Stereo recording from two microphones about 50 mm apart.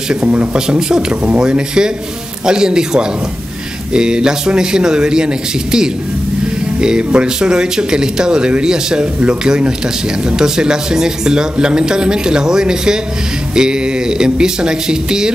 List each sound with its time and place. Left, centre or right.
0.2 s speech: right
0.7 s speech: centre